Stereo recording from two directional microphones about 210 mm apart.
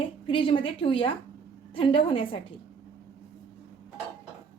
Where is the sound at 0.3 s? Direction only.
25° left (ahead or behind).